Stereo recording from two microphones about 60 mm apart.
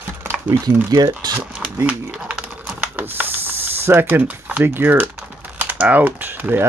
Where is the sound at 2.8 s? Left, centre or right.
Right.